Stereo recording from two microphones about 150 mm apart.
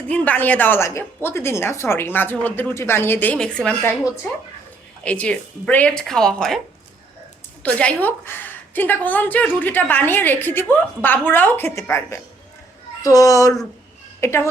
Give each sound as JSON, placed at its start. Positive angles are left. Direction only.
{"t": 0.1, "sound": "a woman's voice", "side_deg": 10}
{"t": 5.0, "sound": "a woman's voice", "side_deg": 10}
{"t": 7.6, "sound": "a woman's voice", "side_deg": 10}